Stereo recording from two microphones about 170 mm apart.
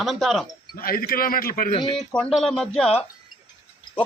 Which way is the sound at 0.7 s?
60° left (ahead or behind).